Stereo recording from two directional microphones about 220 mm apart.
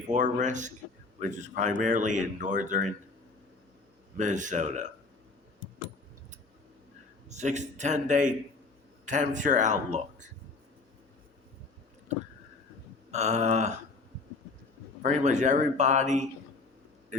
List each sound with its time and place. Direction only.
0.1 s speech: 35° right (ahead or behind)
4.2 s speech: 35° right (ahead or behind)
7.3 s speech: 30° right (ahead or behind)
13.1 s speech: 30° right (ahead or behind)
15.0 s speech: 35° right (ahead or behind)